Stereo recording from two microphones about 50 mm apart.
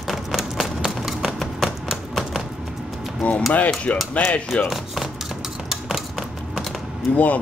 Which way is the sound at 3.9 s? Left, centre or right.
Left.